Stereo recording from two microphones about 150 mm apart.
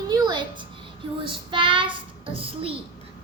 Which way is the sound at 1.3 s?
35° right (ahead or behind).